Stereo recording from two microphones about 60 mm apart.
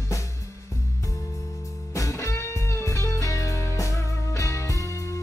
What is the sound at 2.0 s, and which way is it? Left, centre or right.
Music, left.